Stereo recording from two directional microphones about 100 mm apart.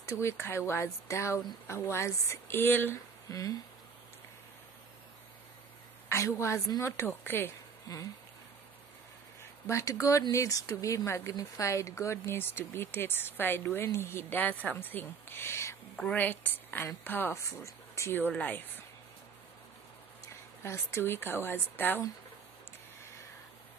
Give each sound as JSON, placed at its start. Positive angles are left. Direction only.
{"t": 0.2, "sound": "speech", "side_deg": 25}
{"t": 3.3, "sound": "speech", "side_deg": 35}
{"t": 6.0, "sound": "speech", "side_deg": 30}
{"t": 9.4, "sound": "speech", "side_deg": 30}
{"t": 16.0, "sound": "speech", "side_deg": 15}
{"t": 20.6, "sound": "speech", "side_deg": 25}